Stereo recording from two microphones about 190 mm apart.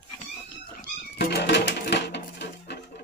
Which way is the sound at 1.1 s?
60° left (ahead or behind).